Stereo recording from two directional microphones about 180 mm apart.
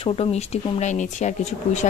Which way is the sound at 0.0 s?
35° left (ahead or behind).